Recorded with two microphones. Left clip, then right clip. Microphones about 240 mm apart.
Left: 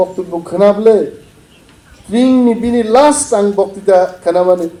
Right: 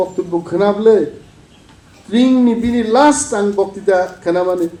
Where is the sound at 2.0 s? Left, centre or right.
Left.